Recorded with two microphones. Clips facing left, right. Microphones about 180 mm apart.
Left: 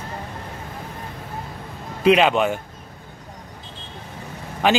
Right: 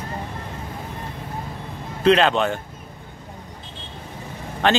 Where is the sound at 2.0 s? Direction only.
10° left (ahead or behind).